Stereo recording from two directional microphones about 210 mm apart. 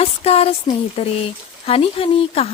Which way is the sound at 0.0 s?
30° left (ahead or behind).